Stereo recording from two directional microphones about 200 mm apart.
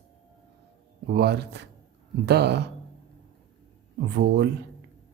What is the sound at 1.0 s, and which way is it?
A man's voice, 55° right (ahead or behind).